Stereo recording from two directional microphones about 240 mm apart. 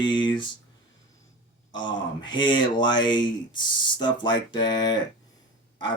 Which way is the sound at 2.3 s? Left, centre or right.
Centre.